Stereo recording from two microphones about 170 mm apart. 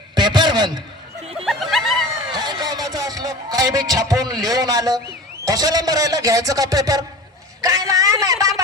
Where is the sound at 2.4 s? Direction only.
25° right (ahead or behind).